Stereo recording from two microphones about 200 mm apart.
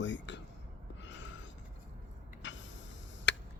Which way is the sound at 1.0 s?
65° left (ahead or behind).